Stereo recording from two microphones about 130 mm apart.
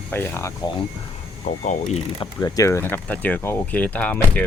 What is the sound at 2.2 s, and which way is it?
Speech, 30° left (ahead or behind).